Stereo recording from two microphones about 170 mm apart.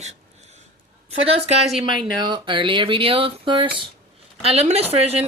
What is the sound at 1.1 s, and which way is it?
Speech, 35° right (ahead or behind).